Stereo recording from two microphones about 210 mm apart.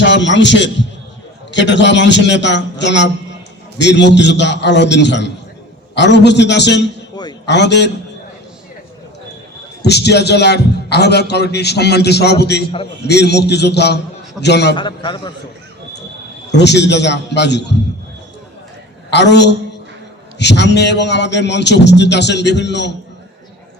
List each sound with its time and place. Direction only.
0.0 s a man's voice: 60° left (ahead or behind)
9.8 s a man's voice: 55° left (ahead or behind)
12.6 s a man's voice: 25° left (ahead or behind)
13.1 s a man's voice: 50° left (ahead or behind)
14.8 s a man's voice: 20° left (ahead or behind)
16.5 s a man's voice: 55° left (ahead or behind)
19.1 s a man's voice: 55° left (ahead or behind)